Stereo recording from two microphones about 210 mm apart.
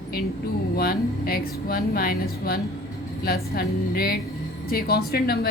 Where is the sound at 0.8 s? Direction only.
45° left (ahead or behind).